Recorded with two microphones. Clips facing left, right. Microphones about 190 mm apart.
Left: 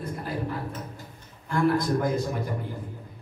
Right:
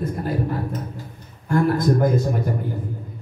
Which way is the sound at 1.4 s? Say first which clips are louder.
Right 5 dB; 50° right (ahead or behind).